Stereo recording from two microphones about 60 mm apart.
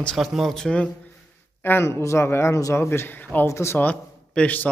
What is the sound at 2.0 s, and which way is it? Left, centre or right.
Speech, left.